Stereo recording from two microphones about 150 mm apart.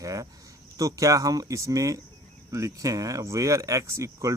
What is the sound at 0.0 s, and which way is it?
Speech, 20° right (ahead or behind).